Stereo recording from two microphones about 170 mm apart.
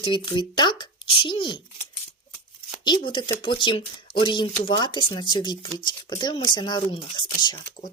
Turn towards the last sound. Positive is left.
turn(degrees=25)  # may be behind; listen again after turning